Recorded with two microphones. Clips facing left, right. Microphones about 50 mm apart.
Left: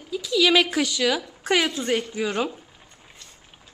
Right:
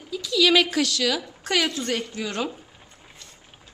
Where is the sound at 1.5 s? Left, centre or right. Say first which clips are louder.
Left 2 dB; centre.